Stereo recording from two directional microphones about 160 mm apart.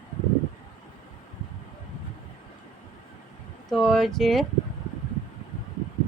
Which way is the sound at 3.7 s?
Centre (ahead or behind).